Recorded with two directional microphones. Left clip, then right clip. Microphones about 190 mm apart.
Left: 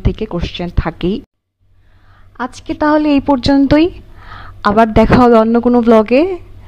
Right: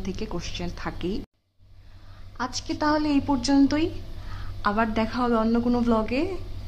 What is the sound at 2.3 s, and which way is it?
A woman's voice, 40° left (ahead or behind).